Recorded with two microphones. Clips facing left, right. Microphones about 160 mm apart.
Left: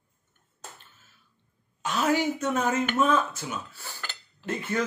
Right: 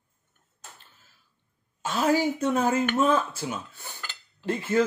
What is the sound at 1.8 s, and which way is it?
Speech, 30° right (ahead or behind).